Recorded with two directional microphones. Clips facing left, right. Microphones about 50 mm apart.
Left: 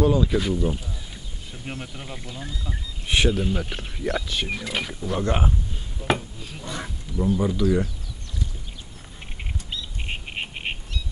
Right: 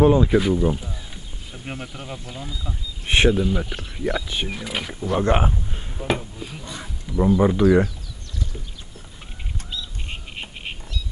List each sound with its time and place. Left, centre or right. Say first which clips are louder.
0.0 s speech: right 5 dB; right; by 2.8 s centre
3.1 s speech: right 4 dB; right
3.5 s speech: right 2 dB; centre
4.5 s speech: even; centre
5.2 s speech: right 5 dB; right
6.1 s speech: right 3 dB; centre
7.2 s speech: right 5 dB; right
10.0 s duck: left 3 dB; left